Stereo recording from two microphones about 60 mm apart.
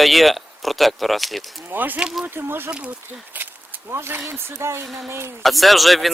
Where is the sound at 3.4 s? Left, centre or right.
Right.